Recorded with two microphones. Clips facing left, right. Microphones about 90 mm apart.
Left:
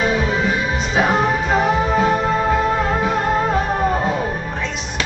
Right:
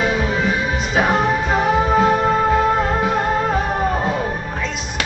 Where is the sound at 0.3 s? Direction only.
20° left (ahead or behind).